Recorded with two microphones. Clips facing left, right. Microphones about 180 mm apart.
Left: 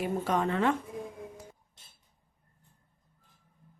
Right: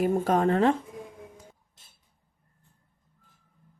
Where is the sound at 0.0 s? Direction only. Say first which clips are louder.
Right 6 dB; 45° right (ahead or behind).